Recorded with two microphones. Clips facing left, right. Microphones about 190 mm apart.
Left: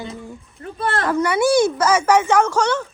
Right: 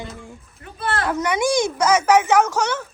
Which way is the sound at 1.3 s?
15° right (ahead or behind).